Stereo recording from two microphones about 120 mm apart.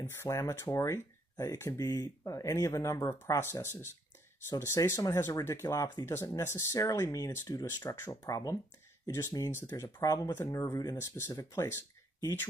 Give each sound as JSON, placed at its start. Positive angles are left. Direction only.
{"t": 0.2, "sound": "speech", "side_deg": 25}